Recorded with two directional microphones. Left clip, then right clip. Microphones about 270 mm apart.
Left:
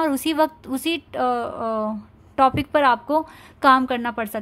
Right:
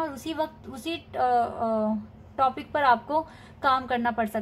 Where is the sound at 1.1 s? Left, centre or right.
Left.